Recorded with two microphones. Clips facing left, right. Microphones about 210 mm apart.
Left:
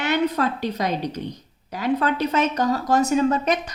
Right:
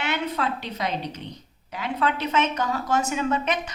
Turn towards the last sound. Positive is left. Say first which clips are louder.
# left 5 dB
turn(degrees=40)  # may be behind; listen again after turning